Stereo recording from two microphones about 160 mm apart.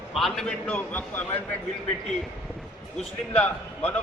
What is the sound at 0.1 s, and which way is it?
A man's voice, centre (ahead or behind).